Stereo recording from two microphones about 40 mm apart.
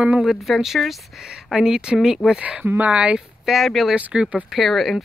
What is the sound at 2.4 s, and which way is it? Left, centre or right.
Speech, right.